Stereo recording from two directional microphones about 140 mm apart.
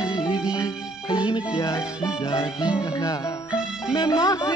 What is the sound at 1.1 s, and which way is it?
Music, 35° left (ahead or behind).